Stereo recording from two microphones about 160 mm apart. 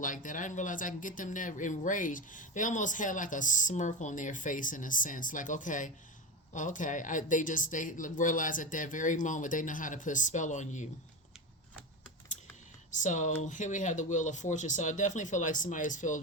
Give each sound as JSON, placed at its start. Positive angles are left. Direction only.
{"t": 0.0, "sound": "speech", "side_deg": 55}
{"t": 12.9, "sound": "speech", "side_deg": 50}